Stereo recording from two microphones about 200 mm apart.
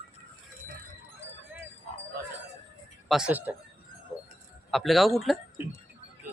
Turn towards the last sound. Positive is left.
turn(degrees=0)  # may be behind; listen again after turning